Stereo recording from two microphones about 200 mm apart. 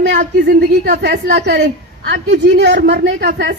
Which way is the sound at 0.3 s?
55° right (ahead or behind).